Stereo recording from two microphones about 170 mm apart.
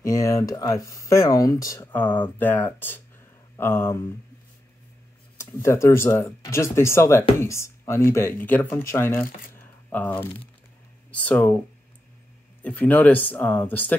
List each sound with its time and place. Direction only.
0.0 s speech: 20° left (ahead or behind)
5.4 s speech: 15° left (ahead or behind)
12.6 s speech: 10° left (ahead or behind)